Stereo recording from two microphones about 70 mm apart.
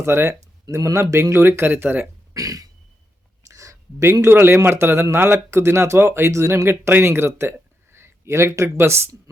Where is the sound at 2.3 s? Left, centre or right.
Right.